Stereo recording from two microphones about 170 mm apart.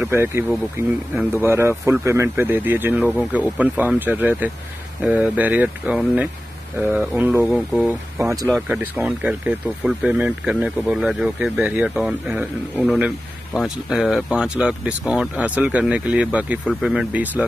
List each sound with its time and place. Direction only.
0.0 s speech: 15° right (ahead or behind)